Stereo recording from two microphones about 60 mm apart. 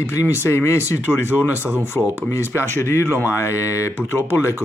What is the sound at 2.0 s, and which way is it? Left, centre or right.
Speech, left.